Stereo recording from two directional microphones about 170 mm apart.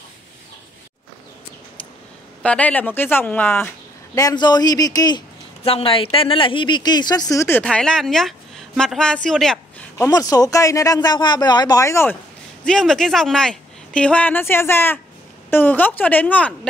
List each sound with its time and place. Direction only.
2.4 s speech: 10° left (ahead or behind)
5.6 s speech: 35° left (ahead or behind); by 7.6 s 15° left (ahead or behind)
7.6 s a woman's voice: 5° left (ahead or behind)
9.9 s speech: 20° left (ahead or behind)
12.6 s speech: 5° left (ahead or behind)